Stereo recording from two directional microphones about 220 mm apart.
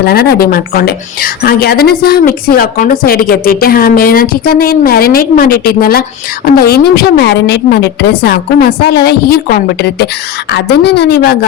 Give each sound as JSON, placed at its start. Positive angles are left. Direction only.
{"t": 0.0, "sound": "speech", "side_deg": 45}